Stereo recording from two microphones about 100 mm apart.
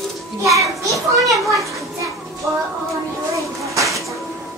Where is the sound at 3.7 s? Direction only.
30° right (ahead or behind).